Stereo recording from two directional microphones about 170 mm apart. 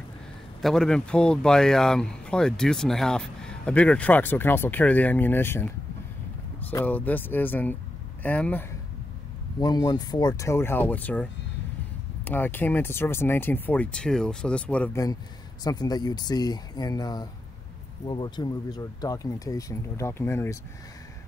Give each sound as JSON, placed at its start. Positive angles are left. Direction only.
{"t": 0.6, "sound": "speech", "side_deg": 0}
{"t": 9.6, "sound": "speech", "side_deg": 25}
{"t": 12.3, "sound": "speech", "side_deg": 10}
{"t": 15.6, "sound": "speech", "side_deg": 25}